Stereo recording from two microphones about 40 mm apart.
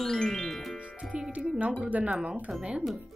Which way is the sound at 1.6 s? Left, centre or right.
Right.